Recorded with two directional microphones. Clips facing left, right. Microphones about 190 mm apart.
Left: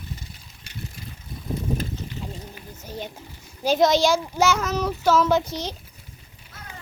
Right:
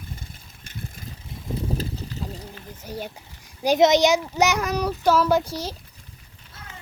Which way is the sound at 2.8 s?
10° right (ahead or behind).